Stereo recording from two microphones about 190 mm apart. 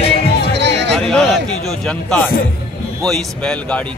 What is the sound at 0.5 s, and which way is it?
Music, 65° right (ahead or behind).